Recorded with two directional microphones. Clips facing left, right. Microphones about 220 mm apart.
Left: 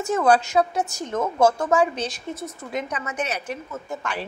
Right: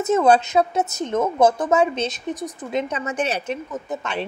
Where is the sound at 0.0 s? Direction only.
25° right (ahead or behind).